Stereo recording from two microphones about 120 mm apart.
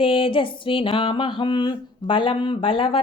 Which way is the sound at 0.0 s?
50° left (ahead or behind).